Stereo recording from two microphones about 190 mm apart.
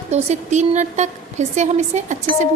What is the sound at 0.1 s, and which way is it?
A woman's voice, 35° right (ahead or behind).